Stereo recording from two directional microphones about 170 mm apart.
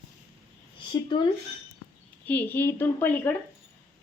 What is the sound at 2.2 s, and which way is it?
A woman's voice, 10° left (ahead or behind).